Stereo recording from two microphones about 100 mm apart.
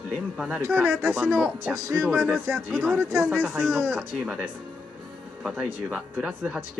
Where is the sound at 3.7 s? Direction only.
20° right (ahead or behind).